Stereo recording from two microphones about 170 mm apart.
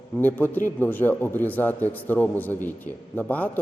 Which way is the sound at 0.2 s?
10° left (ahead or behind).